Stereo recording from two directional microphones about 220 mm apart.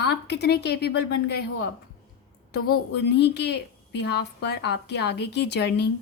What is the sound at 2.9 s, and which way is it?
A woman's voice, 50° left (ahead or behind).